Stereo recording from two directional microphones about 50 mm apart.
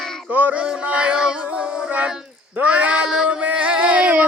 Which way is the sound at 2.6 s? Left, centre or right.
Right.